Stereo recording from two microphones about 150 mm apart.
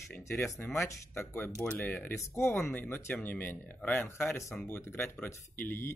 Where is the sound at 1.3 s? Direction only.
15° left (ahead or behind).